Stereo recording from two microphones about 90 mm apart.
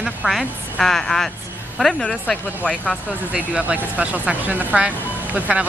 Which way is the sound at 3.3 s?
15° right (ahead or behind).